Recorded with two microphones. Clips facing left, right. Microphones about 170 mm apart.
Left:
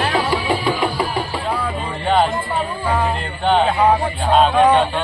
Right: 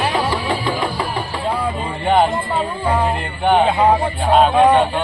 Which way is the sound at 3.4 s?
10° right (ahead or behind).